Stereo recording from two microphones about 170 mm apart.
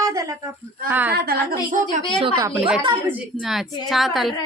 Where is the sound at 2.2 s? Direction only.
20° right (ahead or behind).